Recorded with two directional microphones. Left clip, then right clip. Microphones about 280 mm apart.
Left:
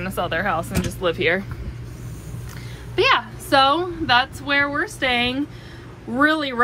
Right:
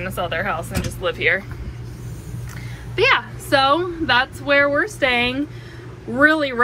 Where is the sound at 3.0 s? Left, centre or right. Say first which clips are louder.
Right 1 dB; centre.